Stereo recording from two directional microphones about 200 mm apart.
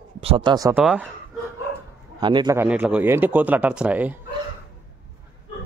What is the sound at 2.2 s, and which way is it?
Speech, 20° right (ahead or behind).